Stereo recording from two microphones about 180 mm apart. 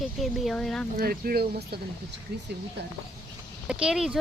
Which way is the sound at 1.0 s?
60° right (ahead or behind).